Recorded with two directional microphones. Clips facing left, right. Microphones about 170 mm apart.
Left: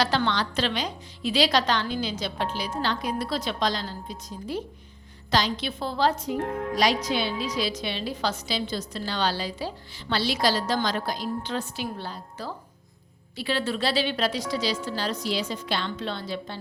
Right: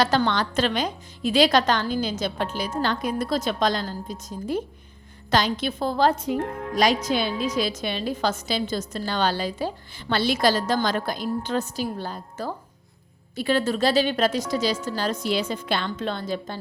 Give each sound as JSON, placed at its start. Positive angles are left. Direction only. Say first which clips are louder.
{"t": 0.0, "sound": "a woman's voice", "louder": "right 3 dB", "side_deg": -50}